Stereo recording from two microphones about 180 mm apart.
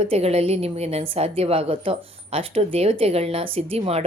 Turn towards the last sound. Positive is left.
turn(degrees=-35)  # may be behind; listen again after turning